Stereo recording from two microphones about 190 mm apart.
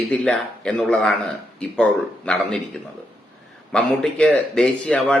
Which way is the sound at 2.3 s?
5° left (ahead or behind).